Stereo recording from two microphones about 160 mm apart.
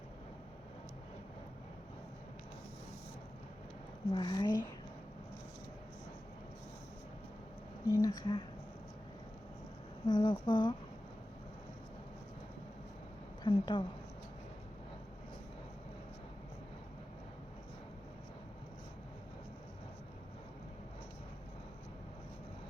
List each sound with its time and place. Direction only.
4.1 s speech: 30° left (ahead or behind)
7.9 s speech: 20° left (ahead or behind)
10.1 s speech: 25° left (ahead or behind)
13.4 s a woman's voice: 25° left (ahead or behind)